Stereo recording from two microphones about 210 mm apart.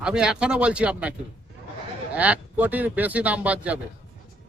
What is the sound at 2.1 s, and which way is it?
Speech, 5° right (ahead or behind).